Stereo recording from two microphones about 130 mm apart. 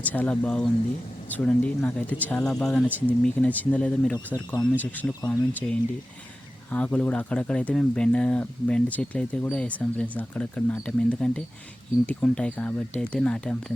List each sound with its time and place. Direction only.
0.0 s speech: 10° left (ahead or behind)